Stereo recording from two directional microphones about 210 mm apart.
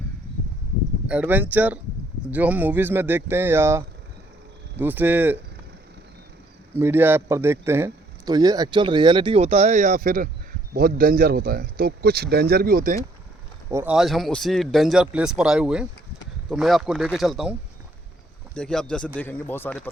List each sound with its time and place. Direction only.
1.0 s speech: 5° right (ahead or behind)
6.7 s a man's voice: 10° right (ahead or behind); by 13.0 s 40° right (ahead or behind)
13.7 s speech: 10° right (ahead or behind)
18.5 s speech: 5° left (ahead or behind)